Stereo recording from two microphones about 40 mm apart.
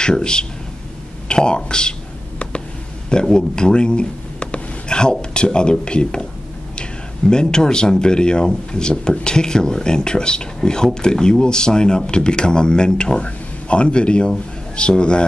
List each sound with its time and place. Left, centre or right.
0.0 s speech: left
3.1 s speech: left